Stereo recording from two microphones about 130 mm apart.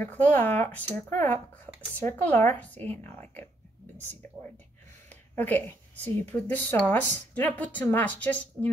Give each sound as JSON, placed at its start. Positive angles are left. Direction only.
{"t": 0.0, "sound": "a woman's voice", "side_deg": 15}
{"t": 5.4, "sound": "a woman's voice", "side_deg": 15}